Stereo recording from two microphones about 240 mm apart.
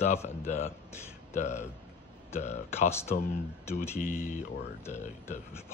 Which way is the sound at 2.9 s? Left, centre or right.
Centre.